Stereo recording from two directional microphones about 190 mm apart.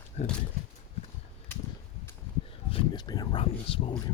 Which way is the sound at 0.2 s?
35° left (ahead or behind).